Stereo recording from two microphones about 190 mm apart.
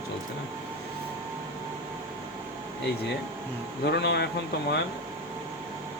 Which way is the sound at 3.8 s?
60° left (ahead or behind).